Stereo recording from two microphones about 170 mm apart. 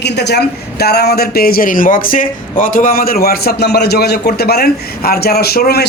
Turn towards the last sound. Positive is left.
turn(degrees=70)  # may be behind; listen again after turning